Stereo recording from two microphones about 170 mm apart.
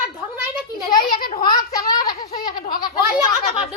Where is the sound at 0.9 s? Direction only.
25° left (ahead or behind).